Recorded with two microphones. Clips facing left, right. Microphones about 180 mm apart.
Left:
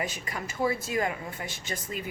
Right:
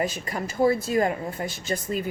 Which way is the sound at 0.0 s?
40° right (ahead or behind).